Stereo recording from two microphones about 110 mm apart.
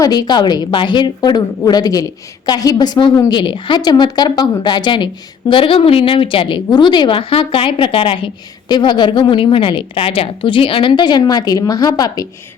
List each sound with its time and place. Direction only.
0.0 s a woman's voice: 40° left (ahead or behind); by 6.6 s 55° left (ahead or behind)
6.7 s a woman's voice: 45° left (ahead or behind)